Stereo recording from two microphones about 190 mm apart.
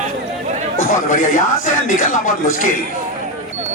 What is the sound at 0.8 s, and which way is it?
Speech, 45° left (ahead or behind).